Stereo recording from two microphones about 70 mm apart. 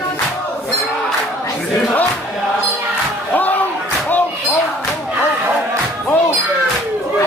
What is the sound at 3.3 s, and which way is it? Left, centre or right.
Music, left.